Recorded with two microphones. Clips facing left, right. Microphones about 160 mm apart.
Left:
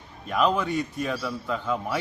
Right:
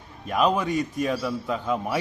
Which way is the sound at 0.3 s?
10° right (ahead or behind).